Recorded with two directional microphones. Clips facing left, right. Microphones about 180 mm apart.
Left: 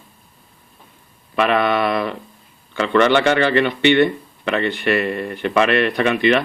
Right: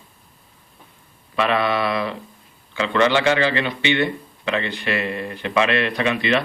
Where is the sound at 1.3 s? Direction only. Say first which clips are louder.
Left 3 dB; 55° left (ahead or behind).